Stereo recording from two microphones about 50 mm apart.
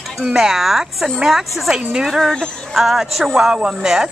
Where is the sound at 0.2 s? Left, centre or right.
Centre.